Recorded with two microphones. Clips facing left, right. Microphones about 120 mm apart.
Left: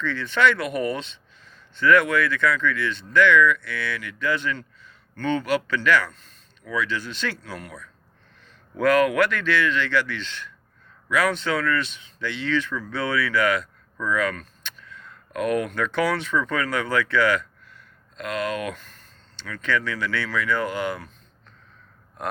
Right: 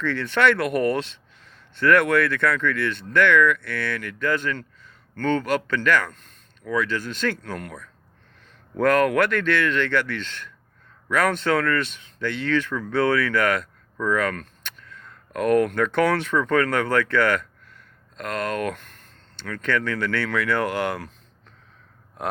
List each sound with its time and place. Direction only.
0.0 s speech: 60° right (ahead or behind)